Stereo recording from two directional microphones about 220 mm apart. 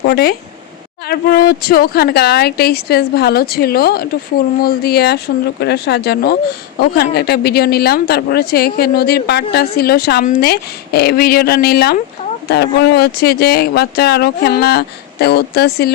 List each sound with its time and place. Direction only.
0.0 s speech: 45° left (ahead or behind)